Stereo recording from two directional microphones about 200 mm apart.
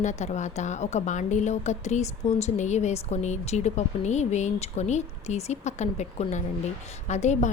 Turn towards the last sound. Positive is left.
turn(degrees=35)  # may be behind; listen again after turning